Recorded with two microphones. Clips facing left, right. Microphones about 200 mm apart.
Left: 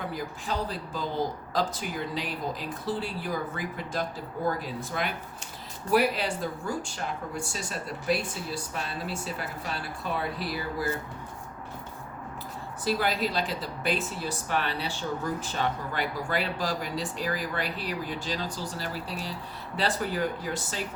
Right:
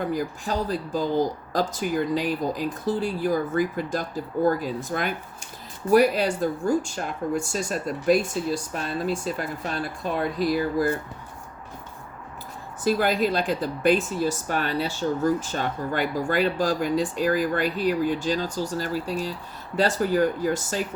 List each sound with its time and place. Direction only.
0.1 s a woman's voice: 45° right (ahead or behind)
2.1 s a woman's voice: 45° right (ahead or behind)
12.8 s a woman's voice: 50° right (ahead or behind)